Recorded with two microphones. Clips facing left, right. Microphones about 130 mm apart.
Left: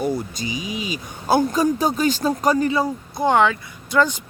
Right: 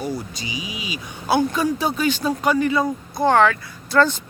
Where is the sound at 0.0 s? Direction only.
50° left (ahead or behind); by 2.8 s 35° left (ahead or behind).